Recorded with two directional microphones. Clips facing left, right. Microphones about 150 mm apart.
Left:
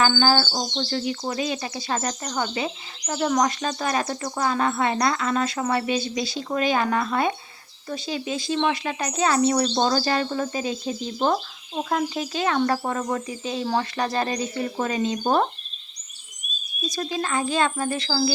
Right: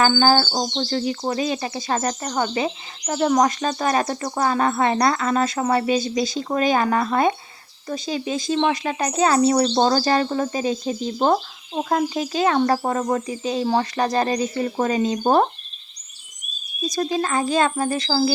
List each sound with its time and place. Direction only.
0.0 s speech: 40° right (ahead or behind)
16.9 s speech: 40° right (ahead or behind)